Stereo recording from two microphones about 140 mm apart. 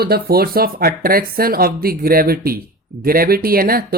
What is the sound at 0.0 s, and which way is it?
Speech, 90° right.